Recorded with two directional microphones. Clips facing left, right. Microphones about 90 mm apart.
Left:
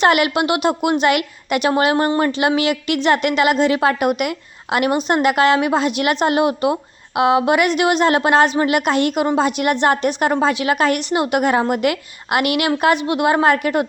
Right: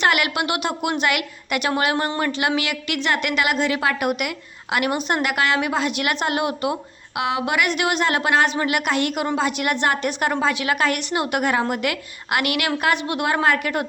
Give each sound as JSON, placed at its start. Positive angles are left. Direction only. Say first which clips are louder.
{"t": 0.0, "sound": "a woman's voice", "louder": "left 5 dB", "side_deg": 25}